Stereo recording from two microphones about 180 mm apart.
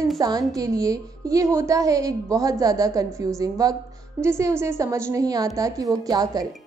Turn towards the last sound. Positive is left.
turn(degrees=-20)  # may be behind; listen again after turning